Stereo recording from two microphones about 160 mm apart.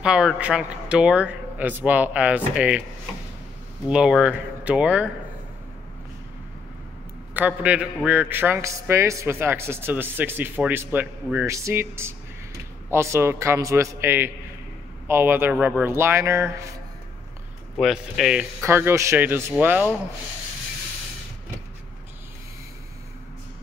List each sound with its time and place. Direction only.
0.0 s a man's voice: 5° right (ahead or behind)
3.8 s speech: 5° right (ahead or behind)
7.3 s a man's voice: 10° right (ahead or behind)
15.5 s speech: 5° right (ahead or behind)
15.8 s a man's voice: 15° right (ahead or behind)
17.7 s speech: centre (ahead or behind)
18.6 s a man's voice: 15° right (ahead or behind)